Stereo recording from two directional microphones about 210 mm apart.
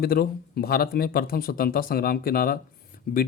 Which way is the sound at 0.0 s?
45° left (ahead or behind).